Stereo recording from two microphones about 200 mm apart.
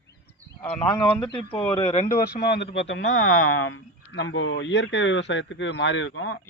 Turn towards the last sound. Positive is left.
turn(degrees=70)  # may be behind; listen again after turning